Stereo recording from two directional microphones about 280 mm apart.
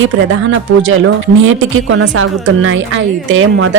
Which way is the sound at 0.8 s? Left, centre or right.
Right.